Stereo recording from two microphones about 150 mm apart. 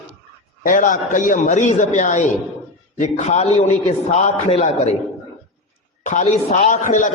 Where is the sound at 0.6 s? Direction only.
65° left (ahead or behind); by 4.7 s 45° left (ahead or behind).